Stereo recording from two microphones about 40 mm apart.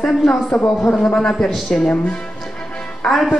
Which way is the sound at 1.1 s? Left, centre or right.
Centre.